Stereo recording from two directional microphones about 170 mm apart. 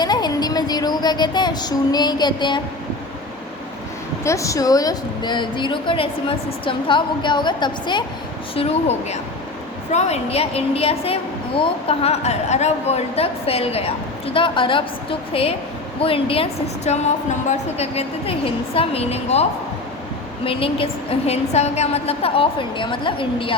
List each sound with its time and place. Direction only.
0.0 s speech: 25° left (ahead or behind)
4.2 s a woman's voice: 15° left (ahead or behind)
8.5 s a woman's voice: 35° left (ahead or behind)